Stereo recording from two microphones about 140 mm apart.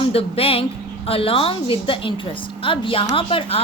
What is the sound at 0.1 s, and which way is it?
A woman's voice, 45° left (ahead or behind).